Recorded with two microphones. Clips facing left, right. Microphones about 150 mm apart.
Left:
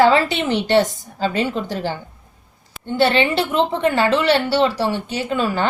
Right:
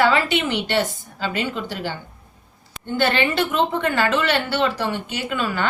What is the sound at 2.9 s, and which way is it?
A woman's voice, 30° left (ahead or behind).